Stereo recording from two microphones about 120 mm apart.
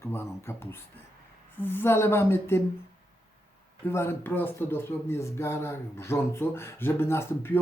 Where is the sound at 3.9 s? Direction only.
20° left (ahead or behind).